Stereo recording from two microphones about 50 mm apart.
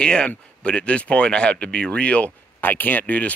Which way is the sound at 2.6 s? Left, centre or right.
Left.